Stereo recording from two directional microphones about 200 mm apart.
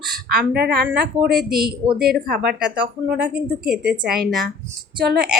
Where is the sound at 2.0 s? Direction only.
50° right (ahead or behind).